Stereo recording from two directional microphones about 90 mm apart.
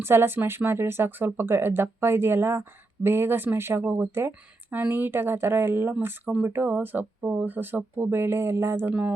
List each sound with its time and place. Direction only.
0.0 s speech: 25° right (ahead or behind)